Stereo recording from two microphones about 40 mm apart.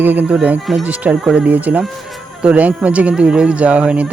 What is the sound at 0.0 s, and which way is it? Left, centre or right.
Speech, right.